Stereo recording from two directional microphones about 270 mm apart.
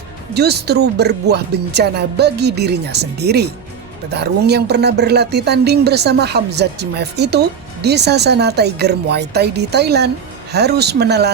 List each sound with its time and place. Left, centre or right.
0.3 s speech: right